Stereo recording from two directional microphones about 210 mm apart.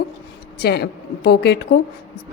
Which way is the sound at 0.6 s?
50° left (ahead or behind).